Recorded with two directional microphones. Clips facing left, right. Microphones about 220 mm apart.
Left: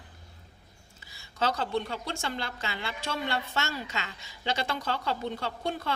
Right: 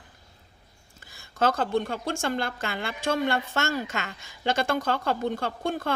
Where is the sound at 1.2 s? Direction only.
50° right (ahead or behind).